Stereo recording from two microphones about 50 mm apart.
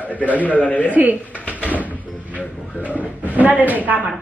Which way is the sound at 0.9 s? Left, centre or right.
Right.